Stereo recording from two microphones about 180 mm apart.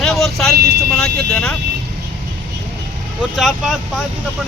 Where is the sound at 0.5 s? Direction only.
55° right (ahead or behind).